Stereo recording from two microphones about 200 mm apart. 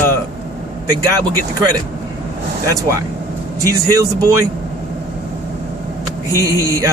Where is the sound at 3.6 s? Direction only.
15° right (ahead or behind).